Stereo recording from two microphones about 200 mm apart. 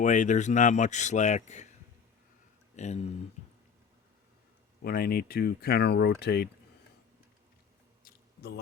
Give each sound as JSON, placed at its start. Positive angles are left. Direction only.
{"t": 0.0, "sound": "speech", "side_deg": 40}
{"t": 2.7, "sound": "speech", "side_deg": 35}
{"t": 4.8, "sound": "speech", "side_deg": 50}
{"t": 8.0, "sound": "a sound", "side_deg": 50}